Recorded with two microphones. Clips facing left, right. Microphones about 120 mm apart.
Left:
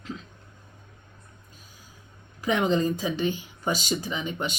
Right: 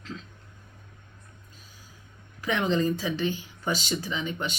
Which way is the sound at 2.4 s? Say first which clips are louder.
Left 2 dB; 15° left (ahead or behind).